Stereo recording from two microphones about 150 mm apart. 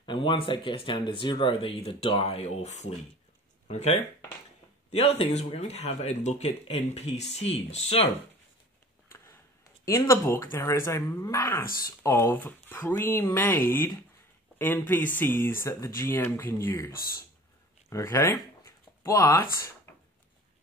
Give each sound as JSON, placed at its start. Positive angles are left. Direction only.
{"t": 0.0, "sound": "speech", "side_deg": 30}
{"t": 9.8, "sound": "speech", "side_deg": 20}